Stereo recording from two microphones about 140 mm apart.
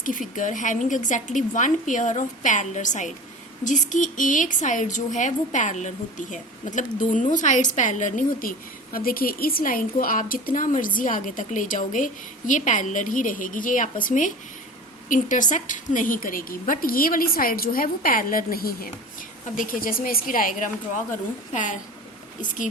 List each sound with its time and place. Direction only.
0.0 s a woman's voice: 70° left (ahead or behind)
21.5 s a woman's voice: 60° left (ahead or behind)